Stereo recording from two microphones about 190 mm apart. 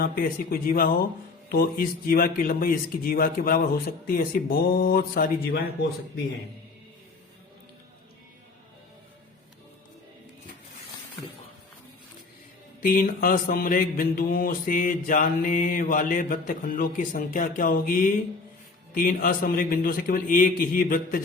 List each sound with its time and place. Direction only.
0.0 s mantra: 50° left (ahead or behind)
12.8 s mantra: 45° left (ahead or behind)